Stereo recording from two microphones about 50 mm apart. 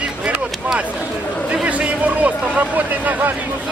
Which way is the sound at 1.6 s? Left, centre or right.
Right.